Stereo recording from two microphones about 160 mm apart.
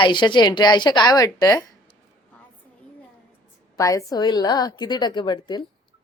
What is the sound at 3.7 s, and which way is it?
Speech, 20° left (ahead or behind).